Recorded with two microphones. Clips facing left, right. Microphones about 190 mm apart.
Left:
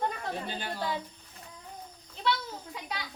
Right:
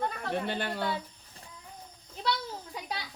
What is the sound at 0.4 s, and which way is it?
Speech, 65° right (ahead or behind).